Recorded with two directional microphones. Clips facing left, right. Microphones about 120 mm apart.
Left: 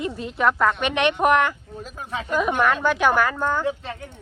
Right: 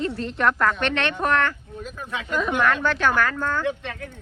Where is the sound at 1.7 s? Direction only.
30° left (ahead or behind).